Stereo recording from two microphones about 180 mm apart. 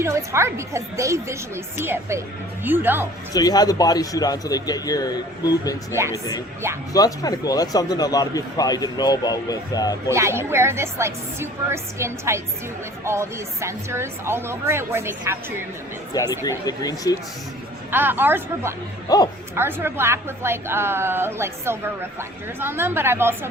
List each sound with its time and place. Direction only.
0.0 s a woman's voice: 15° right (ahead or behind)
3.3 s a man's voice: 20° left (ahead or behind)
10.1 s a woman's voice: 15° right (ahead or behind)
16.4 s a man's voice: 20° left (ahead or behind)
17.9 s a woman's voice: 10° right (ahead or behind)
19.0 s speech: 20° left (ahead or behind)
19.5 s a woman's voice: 15° right (ahead or behind)